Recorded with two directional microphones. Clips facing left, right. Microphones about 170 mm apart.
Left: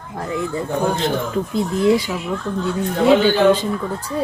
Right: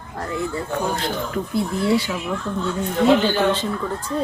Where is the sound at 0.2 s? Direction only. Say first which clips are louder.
Left 2 dB; 15° left (ahead or behind).